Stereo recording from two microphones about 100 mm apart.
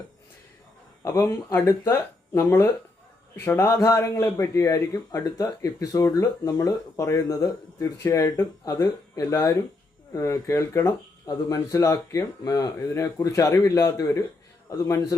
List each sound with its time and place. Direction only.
1.0 s speech: 35° left (ahead or behind)